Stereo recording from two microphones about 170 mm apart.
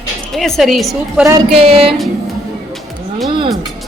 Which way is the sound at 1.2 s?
20° right (ahead or behind).